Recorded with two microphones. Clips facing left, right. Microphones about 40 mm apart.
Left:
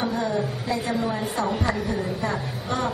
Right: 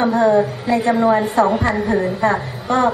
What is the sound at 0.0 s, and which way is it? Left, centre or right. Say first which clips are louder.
A woman's voice: right 11 dB; right.